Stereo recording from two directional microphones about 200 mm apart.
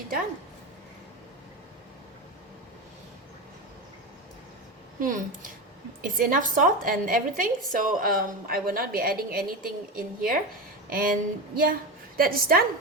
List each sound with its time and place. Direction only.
4.9 s a woman's voice: 40° right (ahead or behind)